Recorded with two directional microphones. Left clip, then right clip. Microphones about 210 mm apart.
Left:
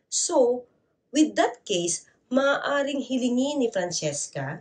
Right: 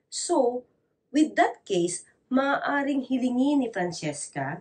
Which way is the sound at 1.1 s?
10° left (ahead or behind).